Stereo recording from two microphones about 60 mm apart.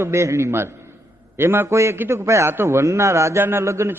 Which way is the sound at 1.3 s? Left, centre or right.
Right.